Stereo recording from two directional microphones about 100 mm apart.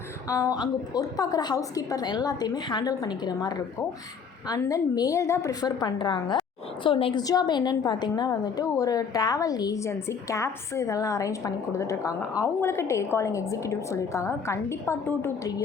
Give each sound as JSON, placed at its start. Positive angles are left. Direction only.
{"t": 0.3, "sound": "a woman's voice", "side_deg": 35}
{"t": 7.2, "sound": "a woman's voice", "side_deg": 40}